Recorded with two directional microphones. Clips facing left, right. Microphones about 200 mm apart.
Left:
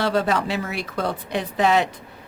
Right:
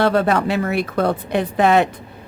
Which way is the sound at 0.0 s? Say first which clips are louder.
Right 5 dB; 60° right (ahead or behind).